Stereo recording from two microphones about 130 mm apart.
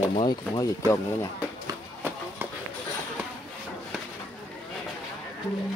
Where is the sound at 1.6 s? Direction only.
15° right (ahead or behind).